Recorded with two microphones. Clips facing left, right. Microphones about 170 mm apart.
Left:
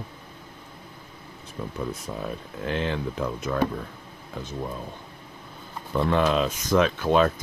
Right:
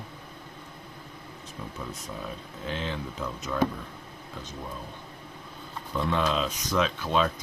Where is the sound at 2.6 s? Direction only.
60° left (ahead or behind).